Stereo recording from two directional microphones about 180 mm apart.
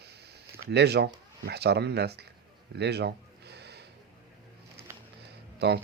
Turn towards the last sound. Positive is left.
turn(degrees=-65)  # may be behind; listen again after turning